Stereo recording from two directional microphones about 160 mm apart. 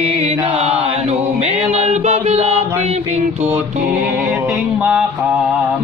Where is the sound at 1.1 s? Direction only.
40° right (ahead or behind).